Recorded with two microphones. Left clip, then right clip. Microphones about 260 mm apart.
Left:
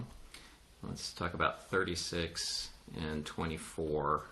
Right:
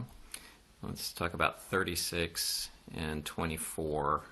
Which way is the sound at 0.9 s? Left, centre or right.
Right.